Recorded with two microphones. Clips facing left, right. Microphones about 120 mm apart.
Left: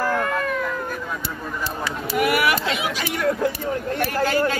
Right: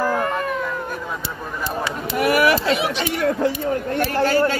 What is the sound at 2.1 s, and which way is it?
A woman's voice, 35° right (ahead or behind).